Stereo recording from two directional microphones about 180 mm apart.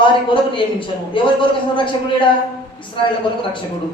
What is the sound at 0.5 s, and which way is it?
A woman's voice, 30° left (ahead or behind).